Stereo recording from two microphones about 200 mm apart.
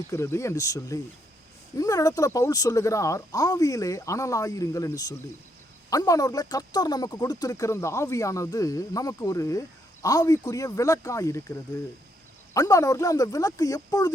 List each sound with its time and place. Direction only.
0.1 s speech: 15° left (ahead or behind)
12.5 s speech: 15° left (ahead or behind)